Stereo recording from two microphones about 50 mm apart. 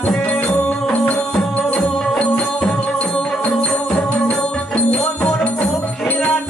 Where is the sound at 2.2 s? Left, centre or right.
Left.